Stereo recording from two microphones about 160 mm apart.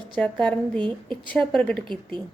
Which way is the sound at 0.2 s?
5° left (ahead or behind).